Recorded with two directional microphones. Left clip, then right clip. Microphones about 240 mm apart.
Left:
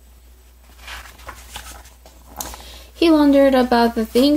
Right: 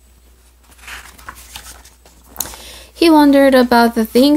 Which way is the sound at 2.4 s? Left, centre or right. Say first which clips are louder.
Right 3 dB; right.